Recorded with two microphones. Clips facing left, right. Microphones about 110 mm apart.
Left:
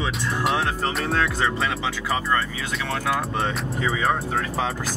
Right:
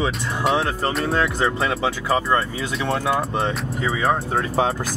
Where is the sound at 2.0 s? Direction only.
30° right (ahead or behind).